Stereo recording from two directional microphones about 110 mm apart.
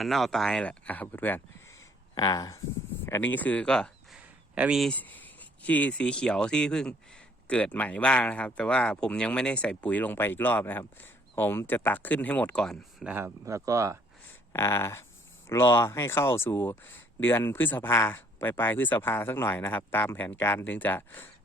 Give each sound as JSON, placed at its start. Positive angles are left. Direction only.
{"t": 0.0, "sound": "speech", "side_deg": 0}
{"t": 2.1, "sound": "speech", "side_deg": 35}
{"t": 3.1, "sound": "speech", "side_deg": 15}
{"t": 4.2, "sound": "a sound", "side_deg": -10}
{"t": 4.8, "sound": "speech", "side_deg": 10}
{"t": 13.2, "sound": "speech", "side_deg": -30}
{"t": 14.5, "sound": "speech", "side_deg": 25}